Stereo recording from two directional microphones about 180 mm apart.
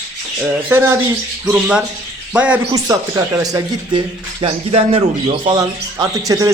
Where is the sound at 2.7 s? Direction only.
20° right (ahead or behind).